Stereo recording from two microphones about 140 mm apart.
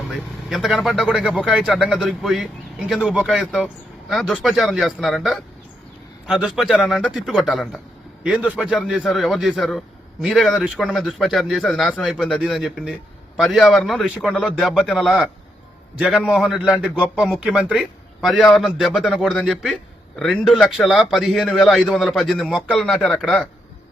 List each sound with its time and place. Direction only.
0.1 s a man's voice: centre (ahead or behind)